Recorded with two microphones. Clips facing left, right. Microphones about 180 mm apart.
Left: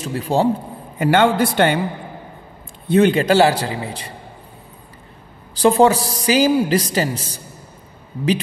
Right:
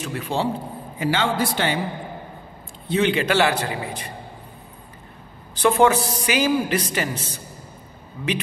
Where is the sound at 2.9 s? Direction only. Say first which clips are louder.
Left 6 dB; 45° left (ahead or behind).